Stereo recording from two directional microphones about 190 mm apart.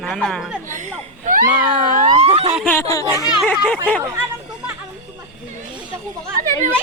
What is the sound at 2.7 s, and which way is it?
Speech, 15° left (ahead or behind).